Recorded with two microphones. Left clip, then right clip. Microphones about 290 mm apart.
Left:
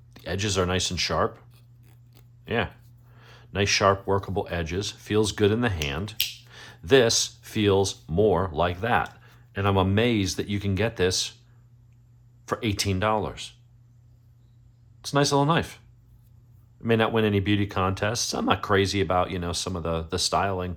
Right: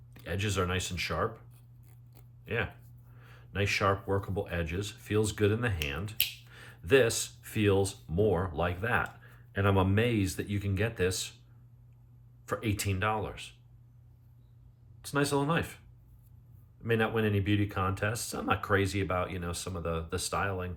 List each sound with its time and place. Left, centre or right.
0.1 s speech: centre
3.2 s speech: centre
12.5 s speech: centre
15.0 s speech: centre
16.8 s speech: centre